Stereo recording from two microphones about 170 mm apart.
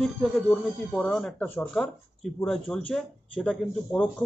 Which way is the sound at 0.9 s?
5° left (ahead or behind).